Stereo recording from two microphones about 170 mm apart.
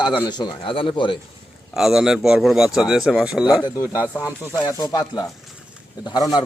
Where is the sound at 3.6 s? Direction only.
15° left (ahead or behind).